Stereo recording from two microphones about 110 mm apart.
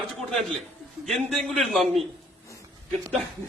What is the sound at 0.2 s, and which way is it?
A man's voice, 5° left (ahead or behind).